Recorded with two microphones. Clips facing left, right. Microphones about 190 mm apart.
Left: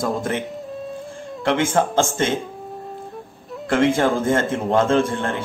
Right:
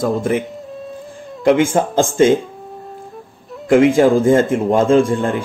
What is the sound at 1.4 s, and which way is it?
Speech, 15° right (ahead or behind).